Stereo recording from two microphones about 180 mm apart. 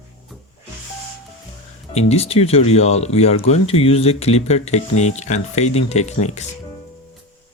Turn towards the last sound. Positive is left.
turn(degrees=40)  # may be behind; listen again after turning